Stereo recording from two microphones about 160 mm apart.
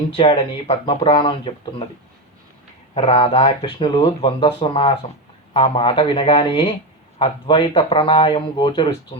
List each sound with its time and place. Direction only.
0.1 s speech: 35° left (ahead or behind)
2.9 s speech: 35° left (ahead or behind)